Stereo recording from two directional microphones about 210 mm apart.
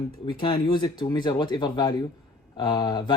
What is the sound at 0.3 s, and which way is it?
Speech, 25° left (ahead or behind).